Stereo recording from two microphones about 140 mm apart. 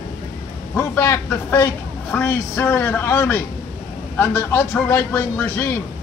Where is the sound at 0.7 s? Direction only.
20° left (ahead or behind).